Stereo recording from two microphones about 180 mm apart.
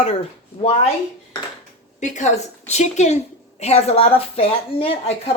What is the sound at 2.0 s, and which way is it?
A woman's voice, 40° left (ahead or behind).